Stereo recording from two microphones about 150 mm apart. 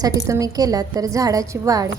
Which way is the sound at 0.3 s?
25° right (ahead or behind).